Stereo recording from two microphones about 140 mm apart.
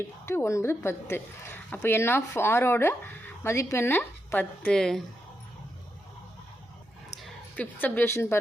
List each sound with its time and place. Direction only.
0.3 s a woman's voice: 20° left (ahead or behind); by 5.0 s 5° left (ahead or behind)
7.2 s a woman's voice: 10° left (ahead or behind)